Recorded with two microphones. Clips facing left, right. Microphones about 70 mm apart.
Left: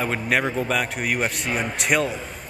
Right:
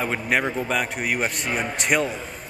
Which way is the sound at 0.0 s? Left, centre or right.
Centre.